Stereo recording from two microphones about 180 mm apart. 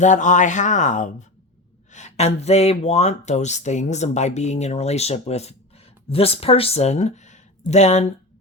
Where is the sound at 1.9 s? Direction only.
40° left (ahead or behind).